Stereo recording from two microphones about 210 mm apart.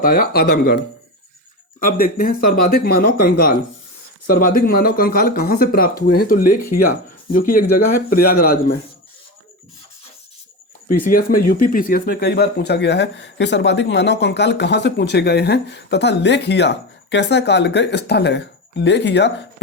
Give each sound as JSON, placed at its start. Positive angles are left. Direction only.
{"t": 0.0, "sound": "speech", "side_deg": 45}
{"t": 10.8, "sound": "speech", "side_deg": 40}